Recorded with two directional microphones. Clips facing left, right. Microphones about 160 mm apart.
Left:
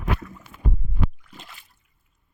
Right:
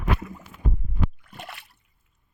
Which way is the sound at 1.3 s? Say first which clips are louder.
Right 5 dB; 65° right (ahead or behind).